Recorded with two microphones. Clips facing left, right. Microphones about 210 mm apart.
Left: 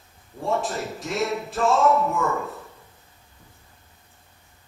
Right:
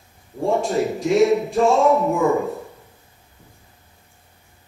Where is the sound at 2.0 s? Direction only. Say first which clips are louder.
Right 7 dB; 15° right (ahead or behind).